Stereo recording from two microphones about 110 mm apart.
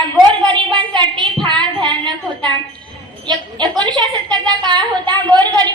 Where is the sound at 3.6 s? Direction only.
40° right (ahead or behind).